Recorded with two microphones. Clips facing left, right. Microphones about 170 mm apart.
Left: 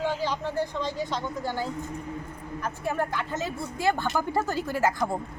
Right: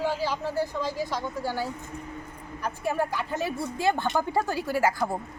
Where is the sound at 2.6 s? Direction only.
15° right (ahead or behind).